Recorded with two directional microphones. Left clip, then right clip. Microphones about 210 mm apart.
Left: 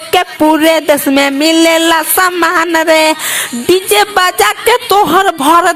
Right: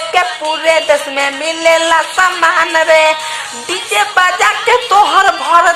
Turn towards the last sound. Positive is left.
turn(degrees=45)  # may be behind; listen again after turning